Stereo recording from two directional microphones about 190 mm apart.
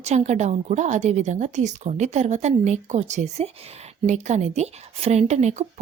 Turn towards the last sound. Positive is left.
turn(degrees=-35)  # may be behind; listen again after turning